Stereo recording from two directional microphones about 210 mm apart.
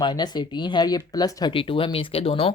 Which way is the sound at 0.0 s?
20° left (ahead or behind).